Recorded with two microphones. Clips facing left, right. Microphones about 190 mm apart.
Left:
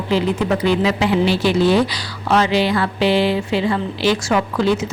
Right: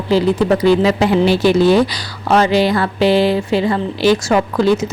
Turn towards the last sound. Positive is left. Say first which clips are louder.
# right 4 dB
turn(degrees=-40)  # may be behind; listen again after turning